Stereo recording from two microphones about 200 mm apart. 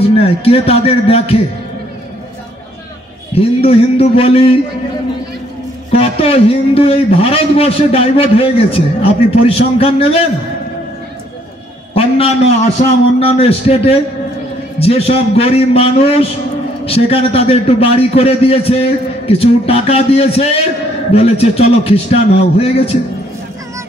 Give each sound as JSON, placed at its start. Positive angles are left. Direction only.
{"t": 0.2, "sound": "a man's voice", "side_deg": 30}
{"t": 3.3, "sound": "a man's voice", "side_deg": 30}
{"t": 5.9, "sound": "a man's voice", "side_deg": 30}
{"t": 11.9, "sound": "a man's voice", "side_deg": 30}